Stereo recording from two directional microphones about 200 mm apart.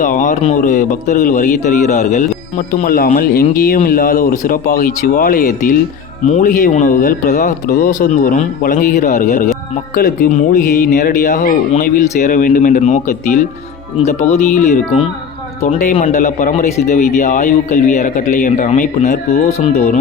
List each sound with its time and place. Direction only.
0.0 s speech: 40° left (ahead or behind)